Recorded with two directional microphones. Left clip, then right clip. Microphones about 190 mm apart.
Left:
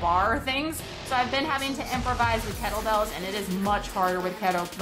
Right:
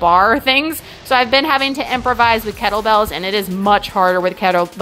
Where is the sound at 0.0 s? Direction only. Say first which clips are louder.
Right 12 dB; 50° right (ahead or behind).